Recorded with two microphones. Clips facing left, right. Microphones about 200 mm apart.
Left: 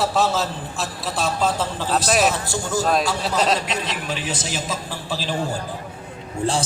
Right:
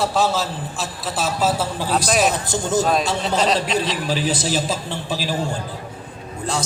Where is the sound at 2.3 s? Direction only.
20° right (ahead or behind).